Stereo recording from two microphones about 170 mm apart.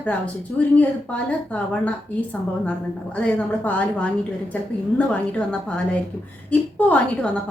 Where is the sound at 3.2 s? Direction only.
10° left (ahead or behind).